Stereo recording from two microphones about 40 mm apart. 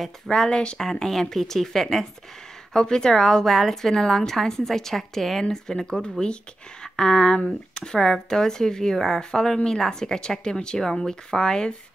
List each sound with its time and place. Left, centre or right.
0.3 s speech: centre
0.8 s speech: centre
5.4 s speech: centre